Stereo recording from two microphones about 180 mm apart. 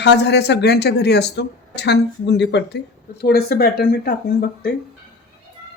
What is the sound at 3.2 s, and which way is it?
Speech, 60° left (ahead or behind).